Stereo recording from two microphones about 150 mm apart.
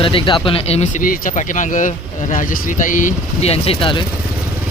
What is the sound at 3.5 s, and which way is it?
Speech, 40° left (ahead or behind).